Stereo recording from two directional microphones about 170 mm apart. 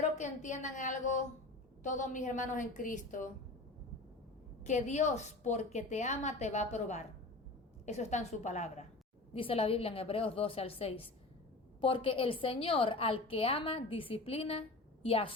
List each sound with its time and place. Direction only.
0.0 s a woman's voice: 45° left (ahead or behind)
4.6 s a woman's voice: 45° left (ahead or behind)